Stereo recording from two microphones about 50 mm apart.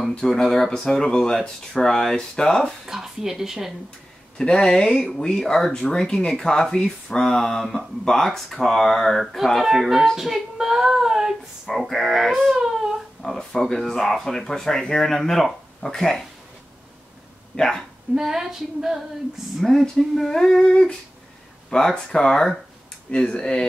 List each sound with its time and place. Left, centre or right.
0.2 s speech: centre
2.9 s speech: centre
4.4 s speech: centre
11.7 s speech: centre
17.6 s speech: centre
18.1 s speech: centre
19.6 s speech: centre